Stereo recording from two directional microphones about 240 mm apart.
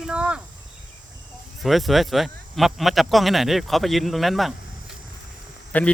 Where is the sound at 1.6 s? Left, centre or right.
Centre.